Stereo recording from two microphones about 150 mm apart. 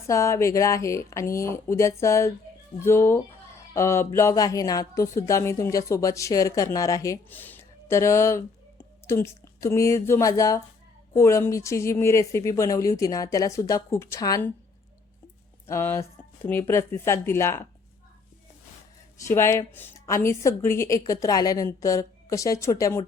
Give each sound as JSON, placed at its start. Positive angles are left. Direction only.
{"t": 0.1, "sound": "a woman's voice", "side_deg": 20}
{"t": 15.6, "sound": "a woman's voice", "side_deg": 15}
{"t": 19.3, "sound": "a woman's voice", "side_deg": 15}